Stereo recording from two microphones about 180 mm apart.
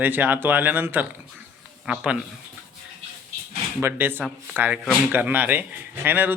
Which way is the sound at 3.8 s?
10° right (ahead or behind).